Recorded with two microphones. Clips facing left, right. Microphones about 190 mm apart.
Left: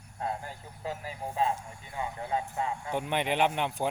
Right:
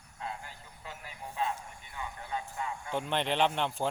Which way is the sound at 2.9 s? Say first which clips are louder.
Even; 10° left (ahead or behind).